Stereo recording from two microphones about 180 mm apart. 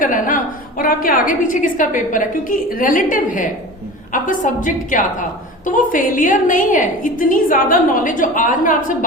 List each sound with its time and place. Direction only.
0.0 s a woman's voice: 50° left (ahead or behind)